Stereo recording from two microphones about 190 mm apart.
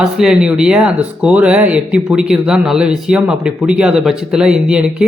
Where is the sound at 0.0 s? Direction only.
5° right (ahead or behind).